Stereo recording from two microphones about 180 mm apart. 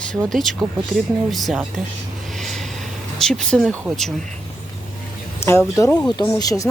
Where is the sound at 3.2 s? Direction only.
5° left (ahead or behind).